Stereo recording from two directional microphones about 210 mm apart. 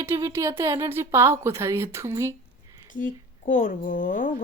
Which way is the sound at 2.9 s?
40° left (ahead or behind).